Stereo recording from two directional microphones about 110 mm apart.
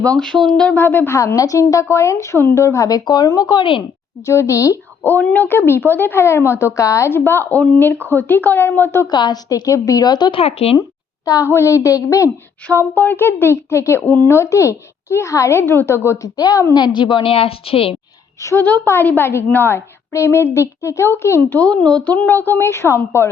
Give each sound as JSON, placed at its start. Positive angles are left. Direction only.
{"t": 0.0, "sound": "speech", "side_deg": 10}
{"t": 4.3, "sound": "speech", "side_deg": 25}
{"t": 5.0, "sound": "a woman's voice", "side_deg": 15}
{"t": 9.0, "sound": "a woman's voice", "side_deg": 40}
{"t": 10.4, "sound": "speech", "side_deg": 65}
{"t": 11.3, "sound": "speech", "side_deg": 30}
{"t": 12.8, "sound": "speech", "side_deg": 15}
{"t": 16.7, "sound": "a woman's voice", "side_deg": 45}
{"t": 18.4, "sound": "speech", "side_deg": 20}
{"t": 21.6, "sound": "a woman's voice", "side_deg": 10}